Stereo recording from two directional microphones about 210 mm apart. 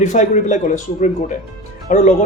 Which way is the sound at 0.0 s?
35° left (ahead or behind).